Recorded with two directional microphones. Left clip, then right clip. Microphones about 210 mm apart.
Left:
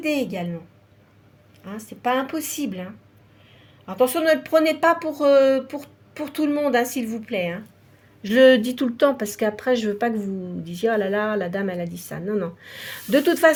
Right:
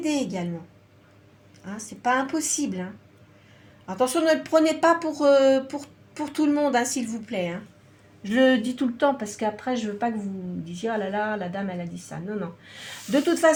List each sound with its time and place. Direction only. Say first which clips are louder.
0.0 s speech: left 3 dB; 35° left (ahead or behind)
1.6 s speech: left 1 dB; 35° left (ahead or behind)
3.8 s speech: left 3 dB; 35° left (ahead or behind)
8.3 s speech: left 6 dB; 50° left (ahead or behind)